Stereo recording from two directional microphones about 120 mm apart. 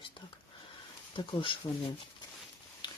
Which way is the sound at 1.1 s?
45° left (ahead or behind).